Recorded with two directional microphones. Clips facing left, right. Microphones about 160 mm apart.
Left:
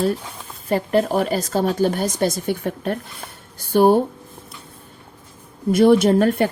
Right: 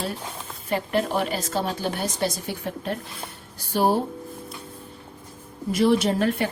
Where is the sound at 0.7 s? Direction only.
40° left (ahead or behind).